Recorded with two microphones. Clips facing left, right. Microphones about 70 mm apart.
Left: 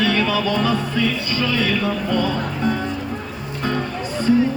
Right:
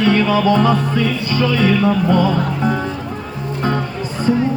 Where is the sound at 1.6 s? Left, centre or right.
Centre.